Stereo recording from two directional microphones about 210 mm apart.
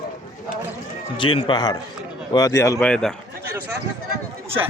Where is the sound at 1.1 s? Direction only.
25° left (ahead or behind); by 3.1 s 5° left (ahead or behind).